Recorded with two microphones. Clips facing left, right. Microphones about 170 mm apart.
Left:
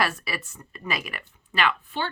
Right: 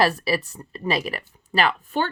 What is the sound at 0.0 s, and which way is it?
Speech, 35° right (ahead or behind).